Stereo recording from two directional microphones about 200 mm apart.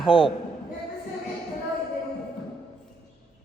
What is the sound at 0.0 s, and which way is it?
Speech, 25° left (ahead or behind).